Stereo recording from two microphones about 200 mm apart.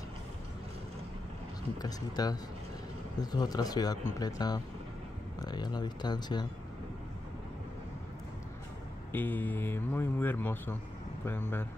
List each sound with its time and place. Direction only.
1.8 s speech: 20° left (ahead or behind)
9.1 s speech: 10° left (ahead or behind)